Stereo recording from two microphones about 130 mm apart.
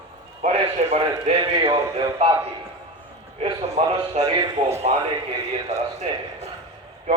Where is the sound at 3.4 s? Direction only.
55° right (ahead or behind).